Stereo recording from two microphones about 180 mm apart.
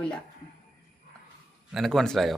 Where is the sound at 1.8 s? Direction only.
Centre (ahead or behind).